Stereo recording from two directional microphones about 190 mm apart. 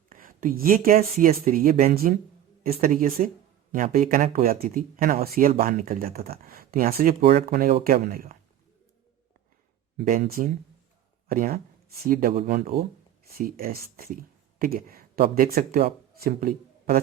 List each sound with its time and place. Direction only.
0.1 s speech: 45° right (ahead or behind)
7.2 s speech: 30° right (ahead or behind)
7.5 s speech: 50° right (ahead or behind)
10.0 s speech: 45° right (ahead or behind)